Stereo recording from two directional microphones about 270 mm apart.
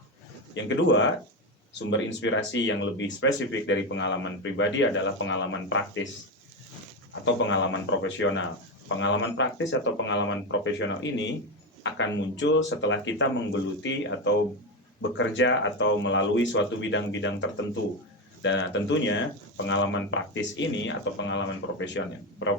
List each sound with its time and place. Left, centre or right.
0.5 s speech: left
7.3 s speech: left